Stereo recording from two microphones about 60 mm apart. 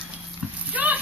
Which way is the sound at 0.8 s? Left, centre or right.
Right.